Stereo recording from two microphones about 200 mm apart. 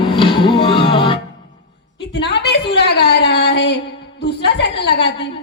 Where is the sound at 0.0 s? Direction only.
25° left (ahead or behind).